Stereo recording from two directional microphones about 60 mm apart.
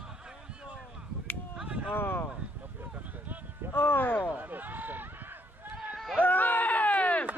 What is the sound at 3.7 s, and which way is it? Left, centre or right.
Speech, left.